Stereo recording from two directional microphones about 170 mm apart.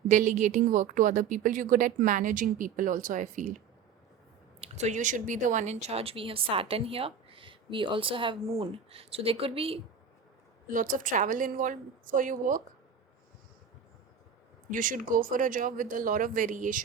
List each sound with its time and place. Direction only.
0.1 s a woman's voice: 45° right (ahead or behind)
4.6 s speech: 40° right (ahead or behind)
10.7 s a woman's voice: 55° right (ahead or behind)
14.7 s a woman's voice: 50° right (ahead or behind)